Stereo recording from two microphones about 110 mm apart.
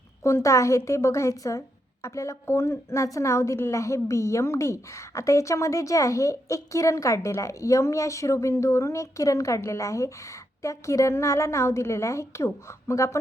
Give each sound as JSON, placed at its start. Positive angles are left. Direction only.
{"t": 0.2, "sound": "a woman's voice", "side_deg": 25}